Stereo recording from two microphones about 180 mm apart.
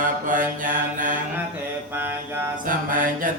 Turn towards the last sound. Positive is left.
turn(degrees=-50)  # may be behind; listen again after turning